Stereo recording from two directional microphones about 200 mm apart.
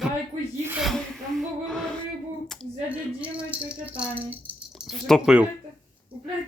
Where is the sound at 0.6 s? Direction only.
5° right (ahead or behind).